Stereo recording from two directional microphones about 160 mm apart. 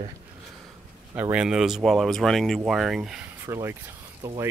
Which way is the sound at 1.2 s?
10° right (ahead or behind).